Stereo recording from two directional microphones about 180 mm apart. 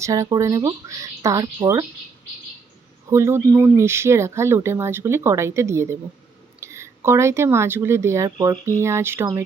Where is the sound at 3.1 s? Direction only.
15° right (ahead or behind).